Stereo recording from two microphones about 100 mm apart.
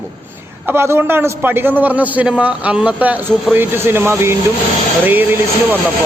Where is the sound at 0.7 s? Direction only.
25° right (ahead or behind).